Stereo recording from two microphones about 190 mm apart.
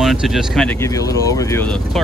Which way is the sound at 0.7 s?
15° left (ahead or behind).